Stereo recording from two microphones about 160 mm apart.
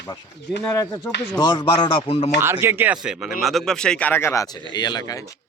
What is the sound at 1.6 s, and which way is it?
Speech, 25° left (ahead or behind).